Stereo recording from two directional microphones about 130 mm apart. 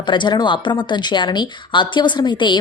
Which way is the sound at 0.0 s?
35° left (ahead or behind).